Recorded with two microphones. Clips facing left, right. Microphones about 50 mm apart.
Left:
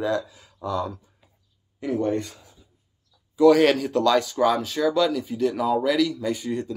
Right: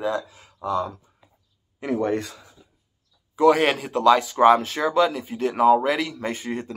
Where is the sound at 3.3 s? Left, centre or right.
Right.